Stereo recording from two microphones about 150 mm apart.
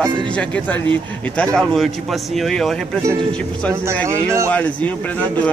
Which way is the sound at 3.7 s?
20° right (ahead or behind).